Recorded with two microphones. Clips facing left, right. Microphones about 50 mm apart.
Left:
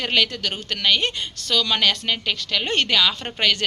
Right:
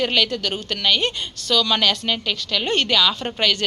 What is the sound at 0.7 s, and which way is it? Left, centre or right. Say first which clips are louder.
A woman's voice: even; centre.